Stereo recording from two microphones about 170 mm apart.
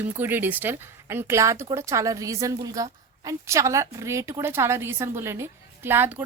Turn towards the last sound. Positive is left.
turn(degrees=-10)  # may be behind; listen again after turning